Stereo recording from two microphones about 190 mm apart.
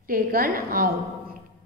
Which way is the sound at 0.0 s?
50° right (ahead or behind).